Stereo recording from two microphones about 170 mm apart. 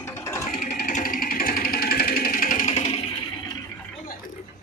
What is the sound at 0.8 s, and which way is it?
Music, 55° left (ahead or behind).